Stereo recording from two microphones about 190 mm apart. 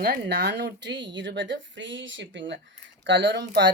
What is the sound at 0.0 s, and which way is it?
Speech, 55° right (ahead or behind).